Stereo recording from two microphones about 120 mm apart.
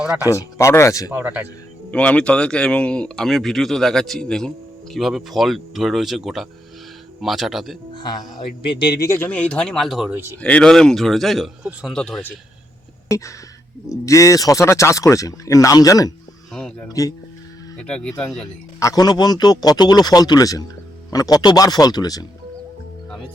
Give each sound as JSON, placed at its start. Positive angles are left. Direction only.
{"t": 0.3, "sound": "speech", "side_deg": 25}
{"t": 1.1, "sound": "speech", "side_deg": -15}
{"t": 1.9, "sound": "speech", "side_deg": 10}
{"t": 8.4, "sound": "a man's voice", "side_deg": 40}
{"t": 9.0, "sound": "speech", "side_deg": 15}
{"t": 11.9, "sound": "speech", "side_deg": 5}
{"t": 13.9, "sound": "speech", "side_deg": 25}
{"t": 16.5, "sound": "a sound", "side_deg": 5}
{"t": 16.9, "sound": "speech", "side_deg": 30}
{"t": 17.7, "sound": "speech", "side_deg": 5}
{"t": 18.1, "sound": "speech", "side_deg": 20}
{"t": 18.8, "sound": "a man's voice", "side_deg": 30}